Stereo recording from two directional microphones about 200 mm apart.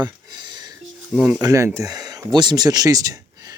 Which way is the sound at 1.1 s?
10° right (ahead or behind).